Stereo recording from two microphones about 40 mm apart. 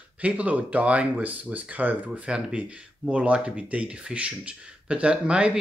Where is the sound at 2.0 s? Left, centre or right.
Right.